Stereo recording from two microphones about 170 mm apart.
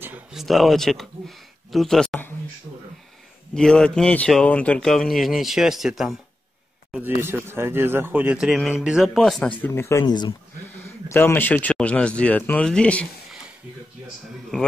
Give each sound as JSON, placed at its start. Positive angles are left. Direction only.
{"t": 0.0, "sound": "speech", "side_deg": -5}
{"t": 3.5, "sound": "speech", "side_deg": 5}
{"t": 6.9, "sound": "speech", "side_deg": -10}
{"t": 9.6, "sound": "speech", "side_deg": 15}
{"t": 11.1, "sound": "speech", "side_deg": 15}